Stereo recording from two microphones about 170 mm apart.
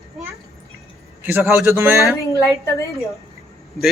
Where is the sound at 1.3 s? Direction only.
10° right (ahead or behind).